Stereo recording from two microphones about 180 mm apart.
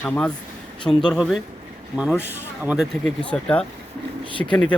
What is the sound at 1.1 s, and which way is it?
Speech, centre (ahead or behind).